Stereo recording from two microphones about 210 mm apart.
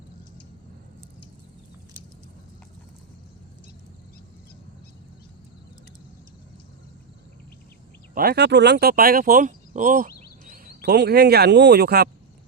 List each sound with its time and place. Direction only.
8.1 s speech: 45° right (ahead or behind)
10.1 s a sound: 45° left (ahead or behind)
10.4 s speech: 40° right (ahead or behind)